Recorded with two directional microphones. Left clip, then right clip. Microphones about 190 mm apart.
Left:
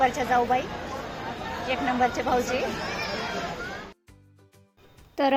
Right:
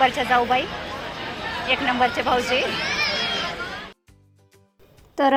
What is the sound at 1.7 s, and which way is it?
Speech, 20° right (ahead or behind).